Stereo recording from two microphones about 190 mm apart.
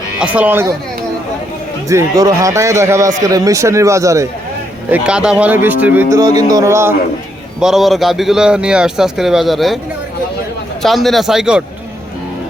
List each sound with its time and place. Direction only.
0.2 s a man's voice: 5° right (ahead or behind)
1.9 s a man's voice: 15° right (ahead or behind)
4.9 s a man's voice: 5° right (ahead or behind)
7.6 s a man's voice: centre (ahead or behind)
10.8 s a man's voice: centre (ahead or behind)